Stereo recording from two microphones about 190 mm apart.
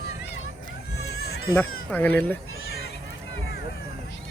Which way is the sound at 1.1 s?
60° left (ahead or behind).